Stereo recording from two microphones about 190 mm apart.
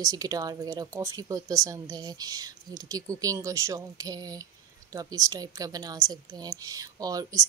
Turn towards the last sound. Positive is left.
turn(degrees=-20)  # may be behind; listen again after turning